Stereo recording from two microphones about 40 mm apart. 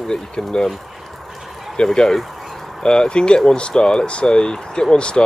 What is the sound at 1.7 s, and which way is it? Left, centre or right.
Speech, left.